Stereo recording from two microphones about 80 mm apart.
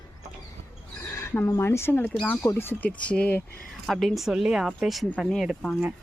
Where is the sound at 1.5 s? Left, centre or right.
Left.